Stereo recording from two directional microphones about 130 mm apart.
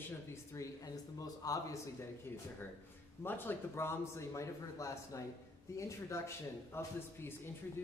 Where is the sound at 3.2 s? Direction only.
15° left (ahead or behind).